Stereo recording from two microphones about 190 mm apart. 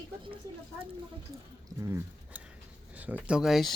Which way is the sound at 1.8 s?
15° right (ahead or behind).